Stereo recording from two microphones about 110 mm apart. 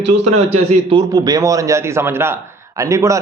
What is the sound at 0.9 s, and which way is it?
A man's voice, 40° right (ahead or behind).